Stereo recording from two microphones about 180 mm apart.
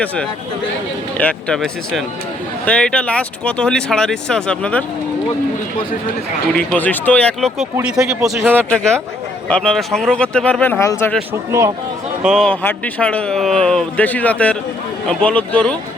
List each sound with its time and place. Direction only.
1.2 s speech: 5° left (ahead or behind)
6.6 s a man's voice: 10° left (ahead or behind)
7.9 s a man's voice: 15° right (ahead or behind)
8.7 s a man's voice: 5° left (ahead or behind)
12.2 s a man's voice: centre (ahead or behind)